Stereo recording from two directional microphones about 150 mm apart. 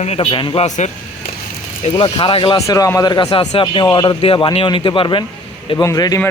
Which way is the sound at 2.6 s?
20° left (ahead or behind).